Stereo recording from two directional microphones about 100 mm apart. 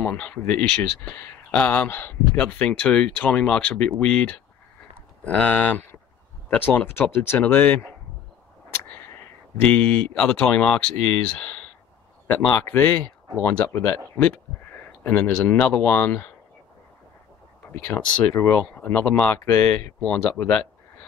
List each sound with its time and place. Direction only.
0.0 s speech: 15° left (ahead or behind)
18.4 s speech: 25° left (ahead or behind)